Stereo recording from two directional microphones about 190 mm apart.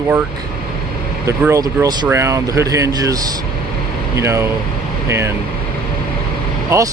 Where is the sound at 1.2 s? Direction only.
15° right (ahead or behind).